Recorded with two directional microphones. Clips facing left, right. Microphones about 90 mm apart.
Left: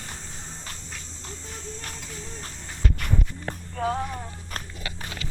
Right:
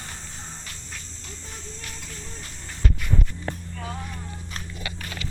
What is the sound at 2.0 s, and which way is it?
Music, 5° left (ahead or behind).